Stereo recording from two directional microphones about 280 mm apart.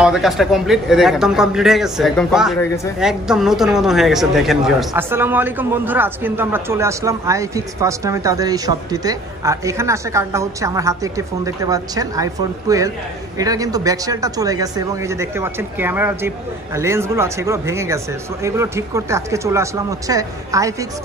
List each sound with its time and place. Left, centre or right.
0.0 s a man's voice: centre